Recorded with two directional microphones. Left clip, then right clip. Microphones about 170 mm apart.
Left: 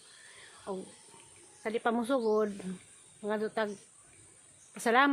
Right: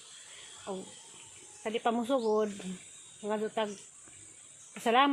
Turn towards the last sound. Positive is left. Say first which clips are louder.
# even
turn(degrees=15)  # may be behind; listen again after turning